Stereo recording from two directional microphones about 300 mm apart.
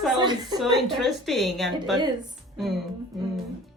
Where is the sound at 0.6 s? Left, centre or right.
Centre.